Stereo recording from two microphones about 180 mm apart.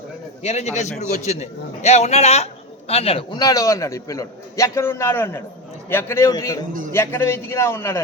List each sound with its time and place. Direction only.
0.4 s a man's voice: 40° left (ahead or behind); by 8.0 s 15° left (ahead or behind)